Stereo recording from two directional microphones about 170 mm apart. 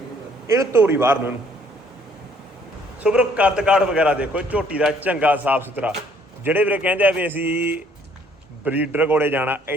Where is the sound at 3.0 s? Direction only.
5° right (ahead or behind).